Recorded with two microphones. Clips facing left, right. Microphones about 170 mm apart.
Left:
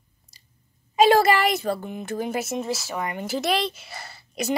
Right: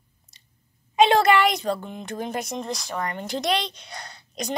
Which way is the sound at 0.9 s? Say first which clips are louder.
Even; centre (ahead or behind).